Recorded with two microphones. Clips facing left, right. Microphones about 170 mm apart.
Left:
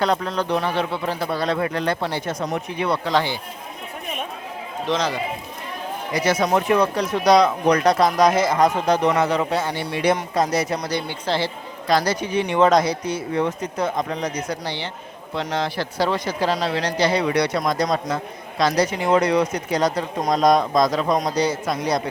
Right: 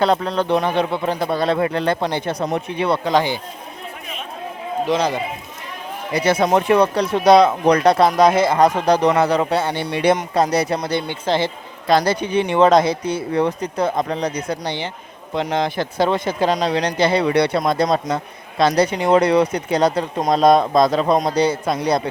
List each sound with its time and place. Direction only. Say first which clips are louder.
0.0 s a man's voice: right 4 dB; 25° right (ahead or behind)
3.1 s speech: right 4 dB; 15° right (ahead or behind)
4.9 s speech: right 3 dB; 10° right (ahead or behind)
6.4 s a man's voice: right 4 dB; 30° right (ahead or behind)
9.9 s a man's voice: right 3 dB; 25° right (ahead or behind)
14.6 s a man's voice: right 3 dB; 20° right (ahead or behind)